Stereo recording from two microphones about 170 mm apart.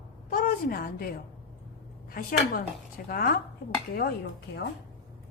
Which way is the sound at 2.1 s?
55° left (ahead or behind).